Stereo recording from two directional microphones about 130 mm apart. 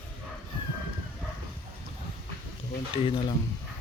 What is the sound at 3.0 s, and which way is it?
Speech, 45° left (ahead or behind).